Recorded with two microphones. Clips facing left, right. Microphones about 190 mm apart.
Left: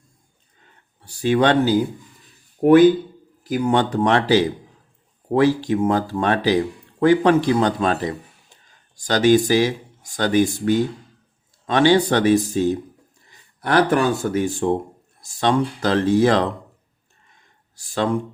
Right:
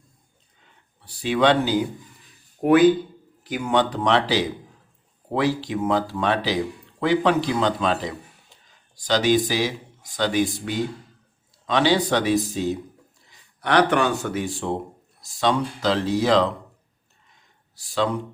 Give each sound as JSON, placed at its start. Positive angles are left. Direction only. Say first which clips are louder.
{"t": 1.0, "sound": "speech", "louder": "left 2 dB", "side_deg": 45}
{"t": 3.4, "sound": "a man's voice", "louder": "left 7 dB", "side_deg": 35}
{"t": 3.8, "sound": "speech", "louder": "right 1 dB", "side_deg": 50}
{"t": 5.5, "sound": "speech", "louder": "left 4 dB", "side_deg": 45}
{"t": 13.7, "sound": "speech", "louder": "left 2 dB", "side_deg": 40}
{"t": 17.7, "sound": "speech", "louder": "left 2 dB", "side_deg": 50}